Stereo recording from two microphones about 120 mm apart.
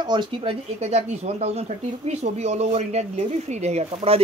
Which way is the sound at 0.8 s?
60° right (ahead or behind).